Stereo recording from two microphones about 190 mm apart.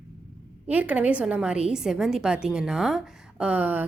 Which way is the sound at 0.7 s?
10° right (ahead or behind).